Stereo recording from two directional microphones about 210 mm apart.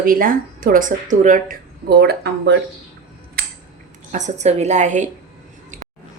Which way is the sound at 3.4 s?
45° right (ahead or behind).